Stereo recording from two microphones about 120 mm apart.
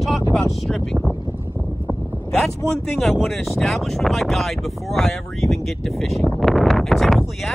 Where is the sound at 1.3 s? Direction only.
20° right (ahead or behind).